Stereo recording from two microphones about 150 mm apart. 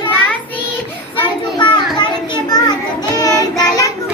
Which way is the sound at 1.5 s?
30° left (ahead or behind).